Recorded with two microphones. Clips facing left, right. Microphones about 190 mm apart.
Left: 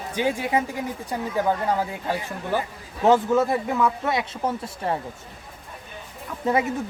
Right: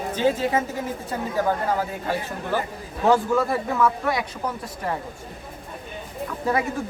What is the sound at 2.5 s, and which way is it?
Speech, 15° left (ahead or behind).